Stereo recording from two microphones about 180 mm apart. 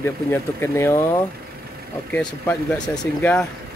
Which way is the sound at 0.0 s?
15° left (ahead or behind).